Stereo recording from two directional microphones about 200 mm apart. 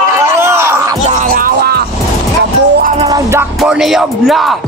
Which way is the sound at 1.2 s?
45° right (ahead or behind).